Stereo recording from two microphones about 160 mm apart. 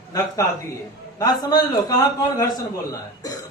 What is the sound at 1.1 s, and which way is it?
A man's voice, 25° left (ahead or behind).